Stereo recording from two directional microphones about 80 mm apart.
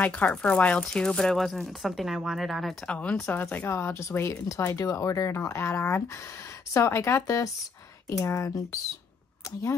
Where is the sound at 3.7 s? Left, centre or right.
Left.